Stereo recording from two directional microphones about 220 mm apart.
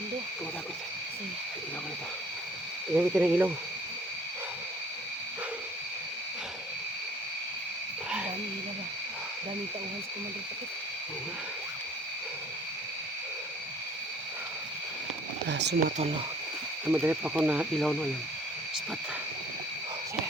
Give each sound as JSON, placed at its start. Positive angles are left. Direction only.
{"t": 2.9, "sound": "speech", "side_deg": -5}
{"t": 15.4, "sound": "a sound", "side_deg": -50}
{"t": 16.9, "sound": "speech", "side_deg": -10}